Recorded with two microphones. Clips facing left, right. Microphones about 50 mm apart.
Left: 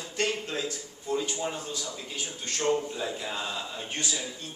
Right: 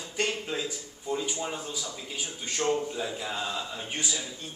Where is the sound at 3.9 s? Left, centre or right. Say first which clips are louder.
Even; centre.